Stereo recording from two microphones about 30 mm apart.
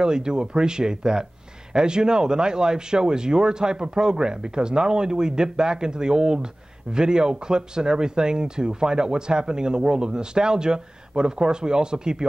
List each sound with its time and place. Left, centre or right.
0.0 s speech: right